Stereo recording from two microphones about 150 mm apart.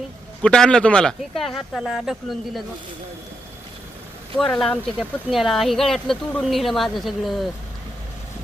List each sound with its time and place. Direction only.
0.4 s speech: 5° left (ahead or behind)
4.4 s speech: 5° left (ahead or behind)